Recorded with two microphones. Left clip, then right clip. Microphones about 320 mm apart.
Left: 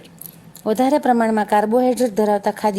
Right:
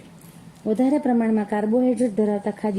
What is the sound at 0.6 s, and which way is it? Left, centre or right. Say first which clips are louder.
A woman's voice: left 5 dB; left.